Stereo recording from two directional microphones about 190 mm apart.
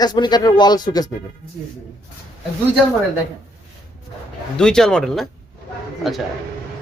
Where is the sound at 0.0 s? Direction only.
20° left (ahead or behind).